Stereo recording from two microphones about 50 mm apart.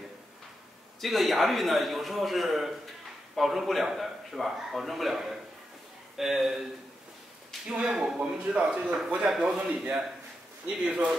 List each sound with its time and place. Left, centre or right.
1.0 s a man's voice: centre
7.8 s a man's voice: centre